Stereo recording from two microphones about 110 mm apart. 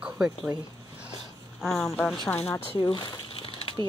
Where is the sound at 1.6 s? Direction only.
5° left (ahead or behind).